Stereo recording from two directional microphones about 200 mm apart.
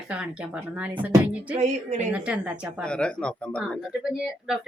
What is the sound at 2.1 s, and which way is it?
Speech, 5° right (ahead or behind).